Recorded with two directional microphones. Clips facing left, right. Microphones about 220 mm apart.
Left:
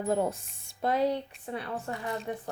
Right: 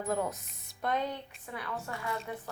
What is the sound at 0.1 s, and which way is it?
Speech, 30° left (ahead or behind).